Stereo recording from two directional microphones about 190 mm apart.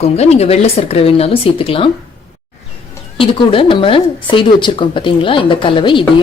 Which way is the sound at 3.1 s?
30° left (ahead or behind).